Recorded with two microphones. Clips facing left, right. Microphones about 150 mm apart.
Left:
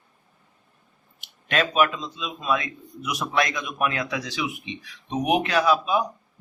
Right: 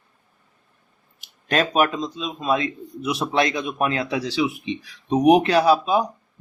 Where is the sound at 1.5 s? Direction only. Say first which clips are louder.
Right 2 dB; 40° right (ahead or behind).